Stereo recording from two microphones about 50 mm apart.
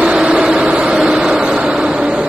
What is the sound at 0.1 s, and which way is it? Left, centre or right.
Vehicle, centre.